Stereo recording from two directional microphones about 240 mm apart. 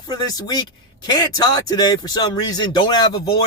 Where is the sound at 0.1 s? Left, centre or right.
Centre.